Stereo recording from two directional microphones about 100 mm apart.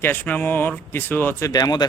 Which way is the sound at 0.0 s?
20° left (ahead or behind).